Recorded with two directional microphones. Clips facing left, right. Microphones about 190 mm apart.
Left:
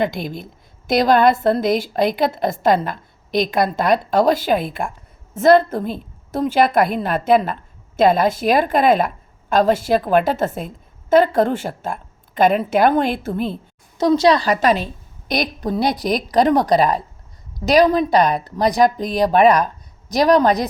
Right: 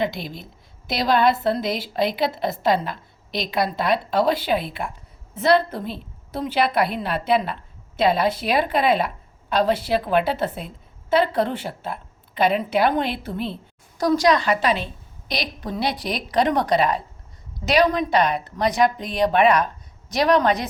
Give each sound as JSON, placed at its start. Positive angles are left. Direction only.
{"t": 0.0, "sound": "a woman's voice", "side_deg": 50}
{"t": 14.0, "sound": "a woman's voice", "side_deg": 25}